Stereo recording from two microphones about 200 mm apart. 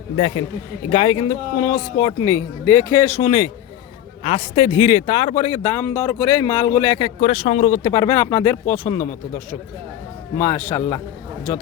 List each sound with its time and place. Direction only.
0.2 s a man's voice: 30° left (ahead or behind); by 2.8 s 15° left (ahead or behind)
3.2 s speech: 25° left (ahead or behind)
7.2 s speech: 30° left (ahead or behind)
10.3 s a man's voice: 15° left (ahead or behind)